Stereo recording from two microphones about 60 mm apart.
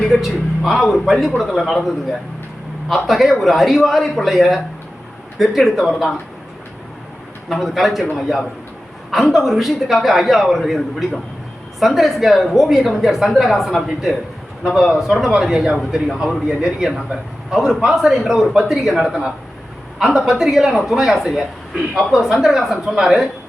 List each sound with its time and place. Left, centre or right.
0.0 s a woman's voice: centre
2.9 s a woman's voice: centre
7.5 s a woman's voice: centre
9.0 s a woman's voice: centre
11.8 s a woman's voice: centre